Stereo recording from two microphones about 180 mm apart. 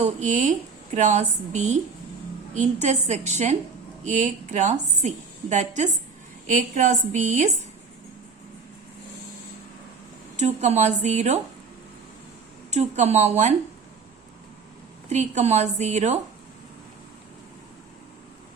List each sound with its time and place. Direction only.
0.0 s a woman's voice: 40° right (ahead or behind)
10.3 s a woman's voice: 40° right (ahead or behind)
12.7 s a woman's voice: 40° right (ahead or behind)
15.1 s a woman's voice: 40° right (ahead or behind)